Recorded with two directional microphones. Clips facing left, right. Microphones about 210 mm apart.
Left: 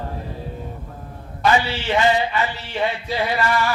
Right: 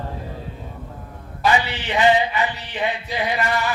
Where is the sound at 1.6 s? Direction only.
20° right (ahead or behind).